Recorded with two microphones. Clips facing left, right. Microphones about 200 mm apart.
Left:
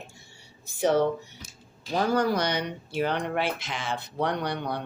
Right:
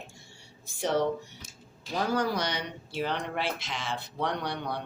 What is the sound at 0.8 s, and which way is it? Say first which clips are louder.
Speech: left 4 dB; centre (ahead or behind).